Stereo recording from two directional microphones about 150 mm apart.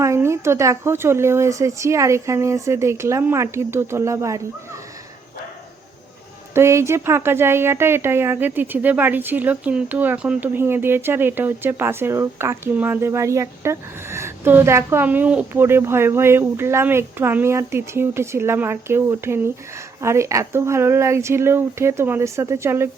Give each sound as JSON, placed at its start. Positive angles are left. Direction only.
{"t": 0.0, "sound": "speech", "side_deg": -20}
{"t": 6.5, "sound": "speech", "side_deg": -20}